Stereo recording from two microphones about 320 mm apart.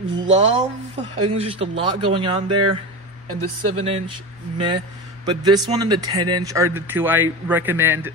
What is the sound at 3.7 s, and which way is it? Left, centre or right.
Speech, centre.